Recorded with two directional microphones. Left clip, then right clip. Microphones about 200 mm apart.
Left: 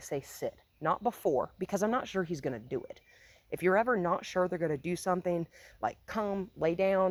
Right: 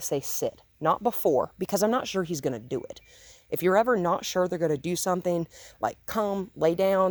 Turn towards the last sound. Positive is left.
turn(degrees=-40)  # may be behind; listen again after turning